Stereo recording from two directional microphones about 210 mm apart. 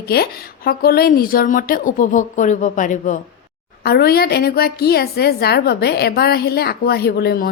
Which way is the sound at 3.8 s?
45° left (ahead or behind).